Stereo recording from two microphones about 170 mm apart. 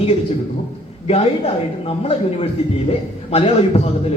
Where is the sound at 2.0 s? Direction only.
35° left (ahead or behind).